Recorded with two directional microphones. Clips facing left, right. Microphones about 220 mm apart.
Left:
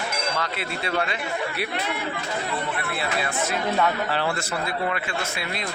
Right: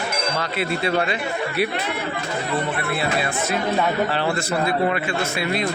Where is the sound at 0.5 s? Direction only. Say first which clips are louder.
Right 6 dB; 5° right (ahead or behind).